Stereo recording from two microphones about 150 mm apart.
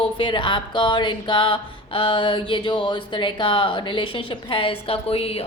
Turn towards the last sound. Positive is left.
turn(degrees=40)  # may be behind; listen again after turning